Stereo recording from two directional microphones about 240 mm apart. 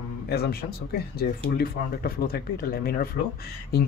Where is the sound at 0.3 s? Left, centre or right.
Left.